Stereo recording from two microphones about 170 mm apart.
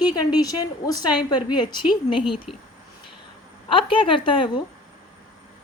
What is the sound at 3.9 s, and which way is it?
Speech, 30° left (ahead or behind).